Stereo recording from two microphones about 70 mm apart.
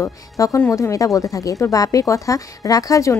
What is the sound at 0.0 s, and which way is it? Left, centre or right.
A woman's voice, left.